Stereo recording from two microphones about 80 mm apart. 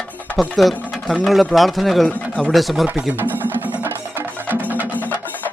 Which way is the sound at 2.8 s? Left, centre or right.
Right.